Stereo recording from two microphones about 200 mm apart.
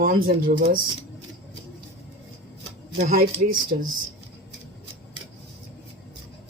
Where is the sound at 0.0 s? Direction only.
45° right (ahead or behind).